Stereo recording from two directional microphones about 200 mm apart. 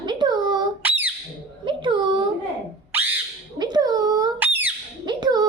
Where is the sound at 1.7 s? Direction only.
25° right (ahead or behind).